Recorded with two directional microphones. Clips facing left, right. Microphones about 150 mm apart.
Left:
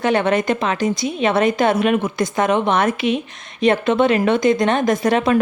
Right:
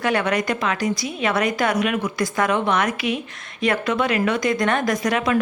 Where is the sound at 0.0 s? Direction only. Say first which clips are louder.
Left 4 dB; 25° left (ahead or behind).